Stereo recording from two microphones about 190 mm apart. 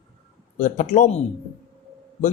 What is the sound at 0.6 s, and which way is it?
Speech, 40° left (ahead or behind).